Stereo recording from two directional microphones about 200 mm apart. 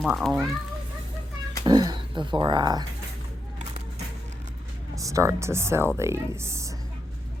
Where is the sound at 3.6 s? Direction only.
35° right (ahead or behind).